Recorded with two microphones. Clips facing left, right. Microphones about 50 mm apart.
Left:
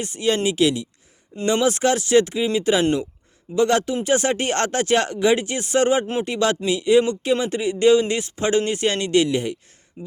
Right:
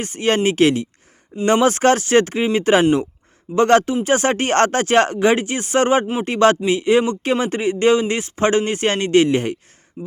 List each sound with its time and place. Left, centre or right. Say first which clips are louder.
0.0 s speech: right 3 dB; right